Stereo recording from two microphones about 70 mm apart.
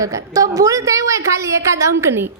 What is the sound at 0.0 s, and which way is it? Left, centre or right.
A woman's voice, right.